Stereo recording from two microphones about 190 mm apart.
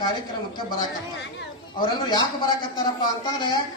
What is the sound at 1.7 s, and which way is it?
A man's voice, 25° left (ahead or behind).